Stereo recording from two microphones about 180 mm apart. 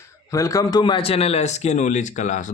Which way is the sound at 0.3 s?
20° left (ahead or behind).